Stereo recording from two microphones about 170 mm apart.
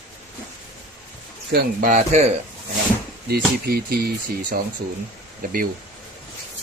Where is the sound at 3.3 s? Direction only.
65° right (ahead or behind).